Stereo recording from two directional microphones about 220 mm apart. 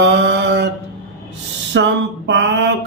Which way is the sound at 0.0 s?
50° right (ahead or behind).